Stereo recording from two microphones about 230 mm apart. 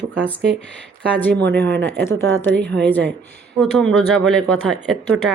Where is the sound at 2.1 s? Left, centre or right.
Centre.